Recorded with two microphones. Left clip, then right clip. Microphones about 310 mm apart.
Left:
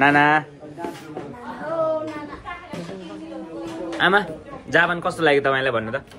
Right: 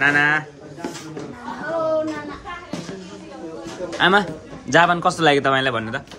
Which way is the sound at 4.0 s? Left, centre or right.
Centre.